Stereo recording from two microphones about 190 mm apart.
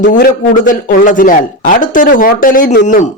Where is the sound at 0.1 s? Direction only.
45° left (ahead or behind).